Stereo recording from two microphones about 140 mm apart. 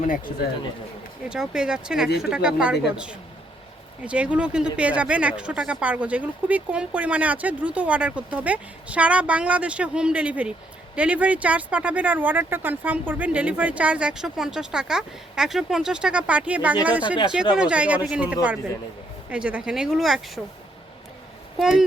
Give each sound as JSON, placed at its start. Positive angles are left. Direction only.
{"t": 0.0, "sound": "speech", "side_deg": 70}
{"t": 1.3, "sound": "speech", "side_deg": -5}
{"t": 21.6, "sound": "speech", "side_deg": -5}